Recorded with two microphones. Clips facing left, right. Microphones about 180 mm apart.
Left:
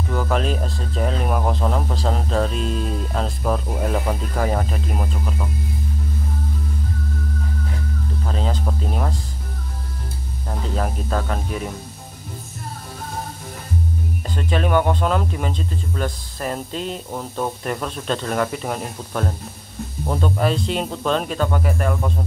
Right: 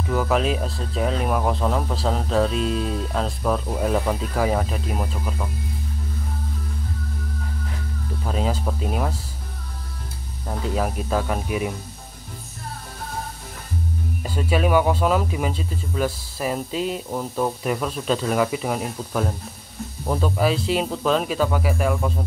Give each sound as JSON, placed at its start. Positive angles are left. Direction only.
{"t": 0.1, "sound": "speech", "side_deg": 0}
{"t": 8.2, "sound": "speech", "side_deg": -5}
{"t": 10.5, "sound": "speech", "side_deg": -5}
{"t": 14.2, "sound": "speech", "side_deg": -10}